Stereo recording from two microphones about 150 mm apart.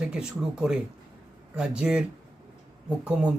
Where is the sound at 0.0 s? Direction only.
5° right (ahead or behind).